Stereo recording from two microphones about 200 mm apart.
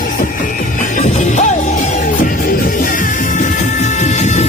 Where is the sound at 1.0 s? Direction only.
35° left (ahead or behind).